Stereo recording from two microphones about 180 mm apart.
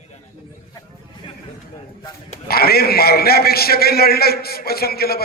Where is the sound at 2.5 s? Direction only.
60° left (ahead or behind).